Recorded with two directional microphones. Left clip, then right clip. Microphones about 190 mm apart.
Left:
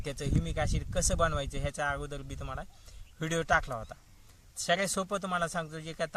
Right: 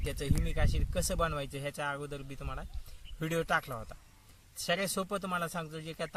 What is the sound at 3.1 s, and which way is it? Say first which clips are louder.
Speech: left 3 dB; centre (ahead or behind).